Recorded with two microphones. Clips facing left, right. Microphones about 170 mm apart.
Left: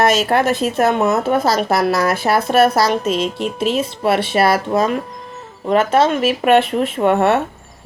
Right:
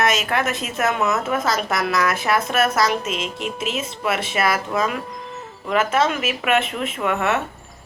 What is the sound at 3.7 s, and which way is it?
Speech, 30° left (ahead or behind).